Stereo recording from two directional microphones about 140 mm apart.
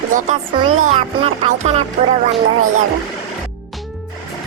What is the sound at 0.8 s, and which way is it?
Speech, 60° right (ahead or behind).